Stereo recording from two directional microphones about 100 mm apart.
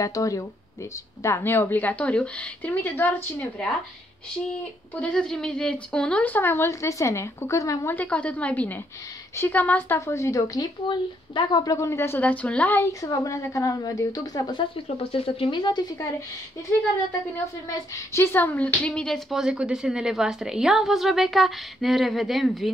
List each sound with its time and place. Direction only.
0.0 s a woman's voice: 35° left (ahead or behind); by 3.6 s 15° left (ahead or behind)
5.0 s speech: 5° left (ahead or behind); by 7.9 s 30° left (ahead or behind)
7.9 s a woman's voice: 15° left (ahead or behind)
9.9 s a woman's voice: 30° left (ahead or behind)
10.9 s a woman's voice: 50° left (ahead or behind)
11.7 s a woman's voice: 30° left (ahead or behind); by 12.7 s 15° left (ahead or behind)
12.7 s a woman's voice: 30° left (ahead or behind)
15.0 s speech: 70° left (ahead or behind); by 16.1 s 45° left (ahead or behind)
17.6 s a woman's voice: 30° left (ahead or behind); by 22.7 s centre (ahead or behind)